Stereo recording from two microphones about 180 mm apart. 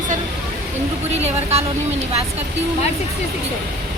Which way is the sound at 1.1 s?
35° right (ahead or behind).